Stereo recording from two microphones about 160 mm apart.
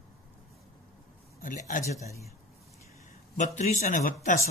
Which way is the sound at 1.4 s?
55° left (ahead or behind).